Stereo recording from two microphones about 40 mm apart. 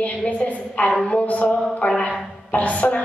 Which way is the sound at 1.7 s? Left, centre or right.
Left.